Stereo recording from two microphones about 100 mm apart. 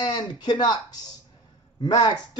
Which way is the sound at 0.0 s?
50° left (ahead or behind).